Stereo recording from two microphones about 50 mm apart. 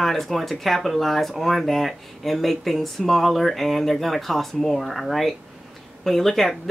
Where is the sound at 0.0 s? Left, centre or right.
Centre.